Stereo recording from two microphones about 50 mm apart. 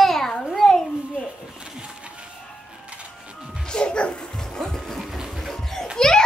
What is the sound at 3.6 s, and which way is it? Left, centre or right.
Music, centre.